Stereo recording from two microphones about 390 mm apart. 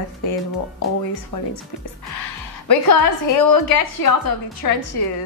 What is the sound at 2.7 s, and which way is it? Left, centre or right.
A woman's voice, left.